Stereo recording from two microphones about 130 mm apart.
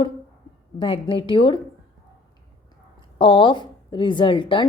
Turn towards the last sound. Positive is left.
turn(degrees=40)  # may be behind; listen again after turning